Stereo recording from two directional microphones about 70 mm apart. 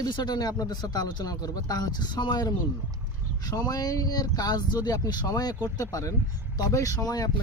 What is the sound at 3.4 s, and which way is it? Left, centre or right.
Speech, left.